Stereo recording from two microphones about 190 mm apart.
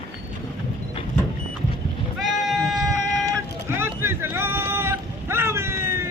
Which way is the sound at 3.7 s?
10° right (ahead or behind).